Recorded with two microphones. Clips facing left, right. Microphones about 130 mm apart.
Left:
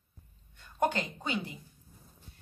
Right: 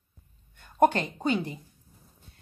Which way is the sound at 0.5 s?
50° right (ahead or behind).